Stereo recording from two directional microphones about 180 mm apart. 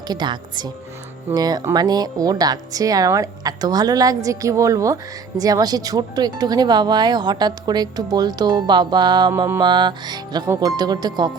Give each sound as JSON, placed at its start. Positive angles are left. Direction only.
{"t": 0.1, "sound": "speech", "side_deg": -25}